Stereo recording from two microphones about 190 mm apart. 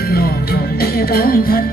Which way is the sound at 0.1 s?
55° left (ahead or behind).